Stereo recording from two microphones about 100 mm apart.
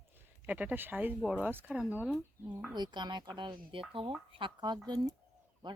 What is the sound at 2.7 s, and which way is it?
Speech, 45° right (ahead or behind).